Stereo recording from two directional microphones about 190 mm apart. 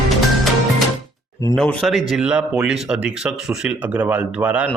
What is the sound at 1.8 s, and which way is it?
Speech, centre (ahead or behind).